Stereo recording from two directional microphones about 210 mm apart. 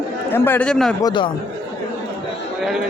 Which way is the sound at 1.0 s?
25° left (ahead or behind).